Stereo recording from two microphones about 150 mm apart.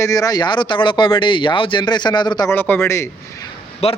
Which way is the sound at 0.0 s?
20° left (ahead or behind).